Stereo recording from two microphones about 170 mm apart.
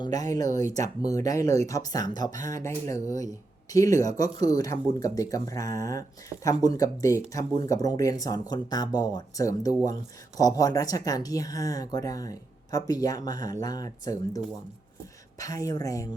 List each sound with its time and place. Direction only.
0.0 s speech: 20° left (ahead or behind)